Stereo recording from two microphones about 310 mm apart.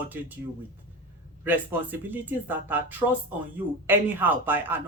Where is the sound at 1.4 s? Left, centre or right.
Centre.